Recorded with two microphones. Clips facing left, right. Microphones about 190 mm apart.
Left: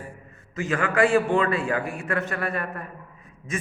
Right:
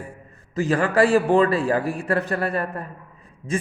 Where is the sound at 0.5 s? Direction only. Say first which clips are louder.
Right 5 dB; 35° right (ahead or behind).